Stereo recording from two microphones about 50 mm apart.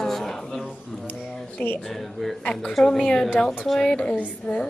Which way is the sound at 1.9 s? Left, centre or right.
Centre.